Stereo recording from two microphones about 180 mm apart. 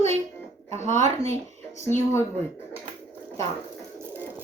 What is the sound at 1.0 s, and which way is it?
Speech, 35° right (ahead or behind).